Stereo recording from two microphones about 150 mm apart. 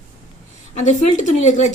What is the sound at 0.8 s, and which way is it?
Speech, 55° left (ahead or behind).